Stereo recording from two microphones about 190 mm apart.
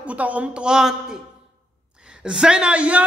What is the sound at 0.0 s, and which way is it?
A man's voice, 5° right (ahead or behind).